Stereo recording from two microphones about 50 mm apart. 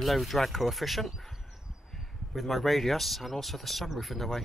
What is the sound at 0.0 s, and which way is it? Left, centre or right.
Speech, centre.